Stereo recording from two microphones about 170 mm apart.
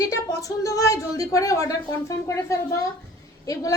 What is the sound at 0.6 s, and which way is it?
A woman's voice, 20° left (ahead or behind).